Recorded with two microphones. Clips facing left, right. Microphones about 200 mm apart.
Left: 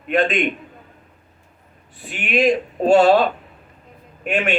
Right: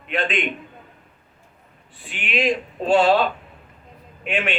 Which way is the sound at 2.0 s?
45° left (ahead or behind).